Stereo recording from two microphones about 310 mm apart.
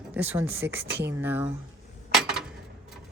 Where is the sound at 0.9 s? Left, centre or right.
Right.